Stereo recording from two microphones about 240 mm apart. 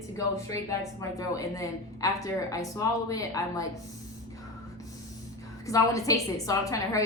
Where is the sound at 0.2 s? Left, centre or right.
Centre.